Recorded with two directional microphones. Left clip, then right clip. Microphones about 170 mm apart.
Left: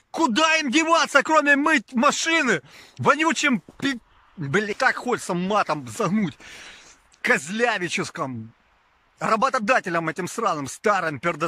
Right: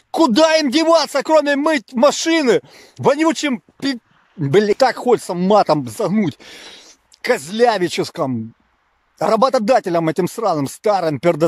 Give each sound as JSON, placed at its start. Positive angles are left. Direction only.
{"t": 0.1, "sound": "a man's voice", "side_deg": -30}